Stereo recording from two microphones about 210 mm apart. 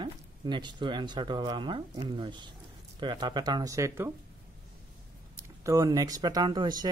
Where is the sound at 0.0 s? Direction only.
20° right (ahead or behind).